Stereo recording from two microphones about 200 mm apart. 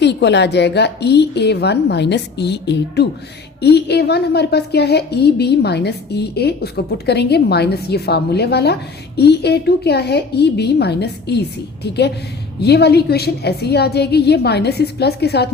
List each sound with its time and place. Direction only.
0.0 s a woman's voice: 60° left (ahead or behind)